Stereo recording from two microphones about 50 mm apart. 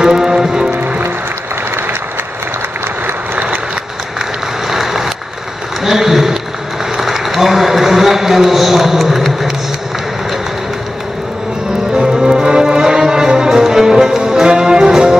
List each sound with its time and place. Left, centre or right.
0.0 s music: centre
0.7 s music: right
4.6 s vehicle: centre
5.9 s applause: centre
7.0 s a sound: centre
11.9 s music: centre